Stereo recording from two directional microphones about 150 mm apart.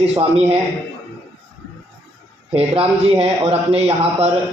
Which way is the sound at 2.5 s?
40° right (ahead or behind).